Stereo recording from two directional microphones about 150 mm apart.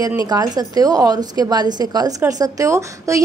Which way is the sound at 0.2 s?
25° right (ahead or behind).